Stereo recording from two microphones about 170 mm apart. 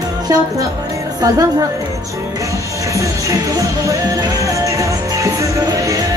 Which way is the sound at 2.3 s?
20° right (ahead or behind).